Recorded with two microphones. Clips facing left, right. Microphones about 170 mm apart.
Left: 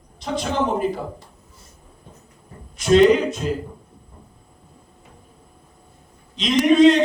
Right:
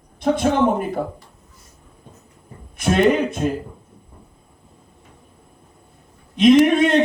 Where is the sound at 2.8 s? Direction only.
55° right (ahead or behind).